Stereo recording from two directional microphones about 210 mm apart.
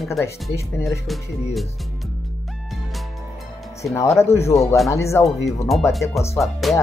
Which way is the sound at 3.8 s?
15° left (ahead or behind).